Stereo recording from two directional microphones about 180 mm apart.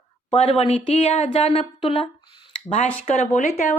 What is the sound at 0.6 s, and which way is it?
Speech, 35° left (ahead or behind).